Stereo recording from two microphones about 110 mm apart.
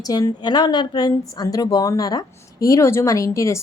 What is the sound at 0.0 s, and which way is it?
A woman's voice, 35° left (ahead or behind).